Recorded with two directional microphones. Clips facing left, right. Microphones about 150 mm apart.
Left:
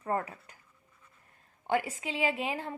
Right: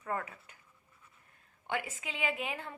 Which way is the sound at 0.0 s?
35° left (ahead or behind).